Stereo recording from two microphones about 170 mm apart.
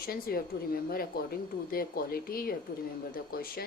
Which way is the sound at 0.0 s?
60° left (ahead or behind).